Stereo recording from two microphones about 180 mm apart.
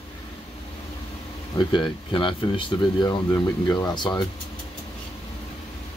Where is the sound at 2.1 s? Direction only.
30° left (ahead or behind).